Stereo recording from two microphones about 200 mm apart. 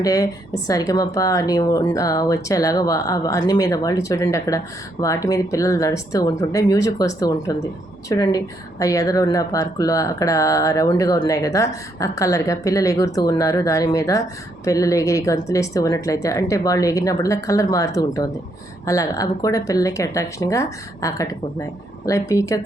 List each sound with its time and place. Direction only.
0.0 s speech: 15° left (ahead or behind)